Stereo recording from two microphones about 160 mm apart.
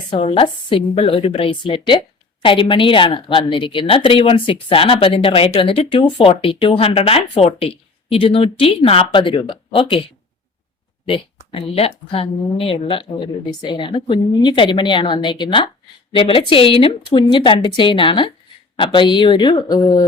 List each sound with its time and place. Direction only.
0.1 s speech: 35° left (ahead or behind)
11.0 s a woman's voice: 35° left (ahead or behind)